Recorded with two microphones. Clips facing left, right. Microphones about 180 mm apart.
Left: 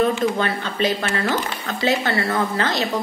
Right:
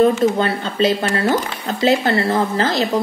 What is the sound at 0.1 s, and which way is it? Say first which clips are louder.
Speech: right 4 dB; 30° right (ahead or behind).